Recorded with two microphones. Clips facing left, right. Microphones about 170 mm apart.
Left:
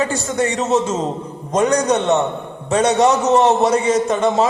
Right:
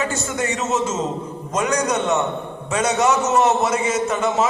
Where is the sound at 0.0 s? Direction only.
35° left (ahead or behind).